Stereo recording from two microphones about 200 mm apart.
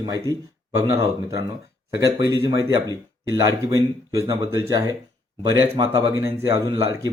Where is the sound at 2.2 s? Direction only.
15° right (ahead or behind).